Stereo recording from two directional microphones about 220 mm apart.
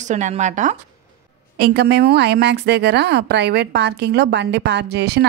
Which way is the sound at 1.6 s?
45° right (ahead or behind).